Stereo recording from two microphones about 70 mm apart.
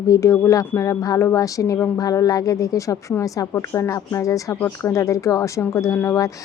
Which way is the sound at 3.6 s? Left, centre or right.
Left.